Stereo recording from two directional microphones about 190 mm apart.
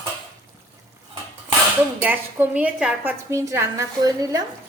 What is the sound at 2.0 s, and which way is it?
A woman's voice, 10° right (ahead or behind).